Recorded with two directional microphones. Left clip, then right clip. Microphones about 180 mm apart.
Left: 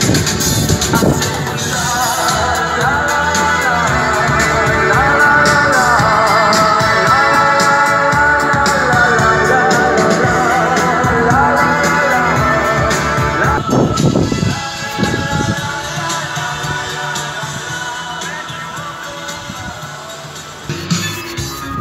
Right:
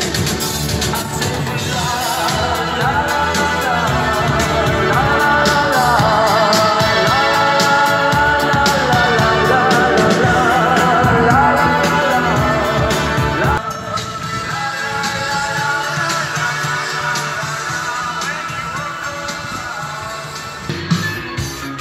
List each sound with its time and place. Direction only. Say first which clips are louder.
1.7 s music: left 3 dB; 5° right (ahead or behind)
6.5 s music: left 2 dB; 25° right (ahead or behind)
8.7 s music: left 2 dB; 5° right (ahead or behind)